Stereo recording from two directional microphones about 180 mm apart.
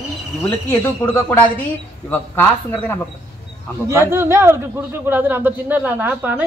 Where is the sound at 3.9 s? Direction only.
15° right (ahead or behind).